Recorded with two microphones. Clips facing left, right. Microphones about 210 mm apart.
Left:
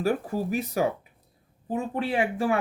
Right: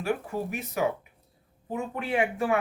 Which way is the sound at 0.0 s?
35° left (ahead or behind).